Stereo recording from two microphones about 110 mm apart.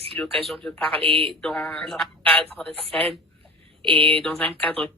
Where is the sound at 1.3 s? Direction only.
10° left (ahead or behind).